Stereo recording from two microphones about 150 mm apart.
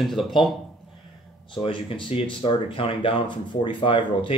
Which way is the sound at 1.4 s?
35° left (ahead or behind).